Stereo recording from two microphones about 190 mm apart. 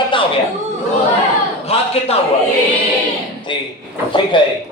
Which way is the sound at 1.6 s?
30° left (ahead or behind).